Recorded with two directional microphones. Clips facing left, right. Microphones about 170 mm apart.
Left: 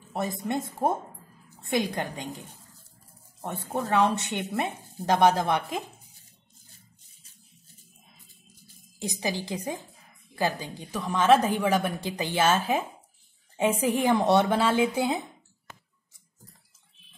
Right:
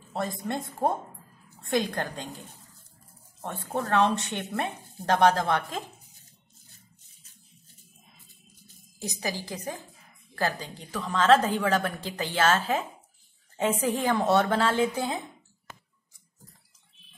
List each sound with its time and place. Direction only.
0.1 s speech: 15° left (ahead or behind)
9.2 s a woman's voice: 20° left (ahead or behind)